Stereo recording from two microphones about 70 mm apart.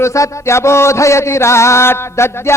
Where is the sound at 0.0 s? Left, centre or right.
Left.